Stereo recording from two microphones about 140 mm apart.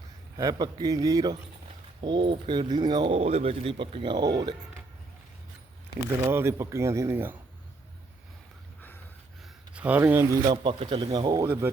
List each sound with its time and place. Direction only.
0.3 s speech: 30° right (ahead or behind)
6.2 s speech: 15° right (ahead or behind)
9.7 s speech: 10° right (ahead or behind); by 11.4 s 30° right (ahead or behind)